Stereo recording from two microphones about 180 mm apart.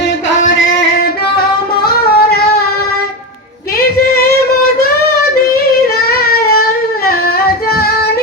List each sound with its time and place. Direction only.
1.8 s singing: 60° left (ahead or behind)
6.1 s a sound: 55° left (ahead or behind)
7.7 s yodeling: 60° left (ahead or behind)